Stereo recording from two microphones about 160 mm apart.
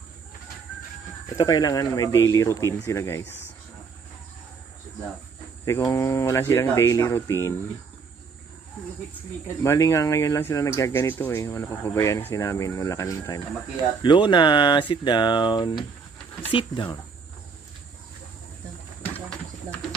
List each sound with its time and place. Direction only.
1.4 s speech: 25° left (ahead or behind)
5.9 s speech: 20° left (ahead or behind)
9.6 s speech: 15° left (ahead or behind)